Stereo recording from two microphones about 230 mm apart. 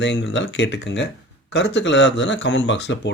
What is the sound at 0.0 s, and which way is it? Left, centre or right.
Speech, left.